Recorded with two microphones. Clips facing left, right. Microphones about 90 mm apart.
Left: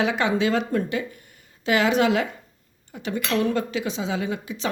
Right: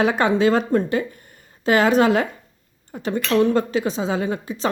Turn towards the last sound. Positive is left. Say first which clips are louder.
# right 4 dB
turn(degrees=-40)  # may be behind; listen again after turning